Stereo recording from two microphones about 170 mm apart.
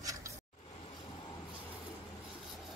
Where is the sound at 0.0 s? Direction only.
20° right (ahead or behind).